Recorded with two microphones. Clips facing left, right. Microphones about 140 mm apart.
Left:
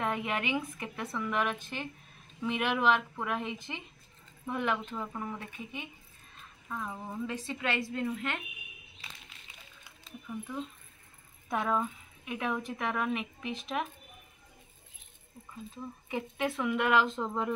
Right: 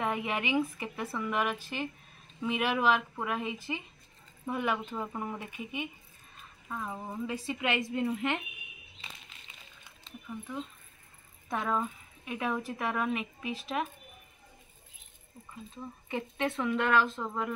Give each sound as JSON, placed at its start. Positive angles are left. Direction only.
{"t": 0.0, "sound": "a woman's voice", "side_deg": -5}
{"t": 9.8, "sound": "a sound", "side_deg": 5}
{"t": 11.4, "sound": "speech", "side_deg": 0}
{"t": 15.7, "sound": "speech", "side_deg": 5}